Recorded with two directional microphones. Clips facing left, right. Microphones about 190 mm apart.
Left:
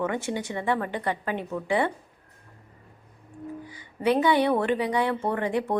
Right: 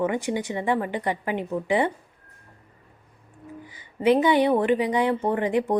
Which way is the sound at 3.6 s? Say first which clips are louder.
Right 4 dB; 20° right (ahead or behind).